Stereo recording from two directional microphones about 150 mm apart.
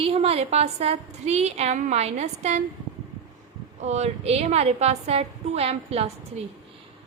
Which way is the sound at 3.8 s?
50° right (ahead or behind).